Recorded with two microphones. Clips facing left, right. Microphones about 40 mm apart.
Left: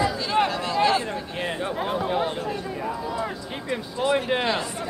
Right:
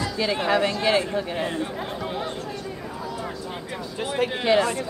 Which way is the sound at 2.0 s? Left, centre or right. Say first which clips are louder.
Left 6 dB; centre.